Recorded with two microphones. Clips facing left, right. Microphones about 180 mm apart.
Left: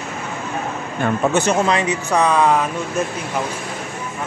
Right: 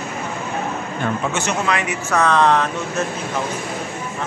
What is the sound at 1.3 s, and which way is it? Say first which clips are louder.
Speech: left 4 dB; 30° left (ahead or behind).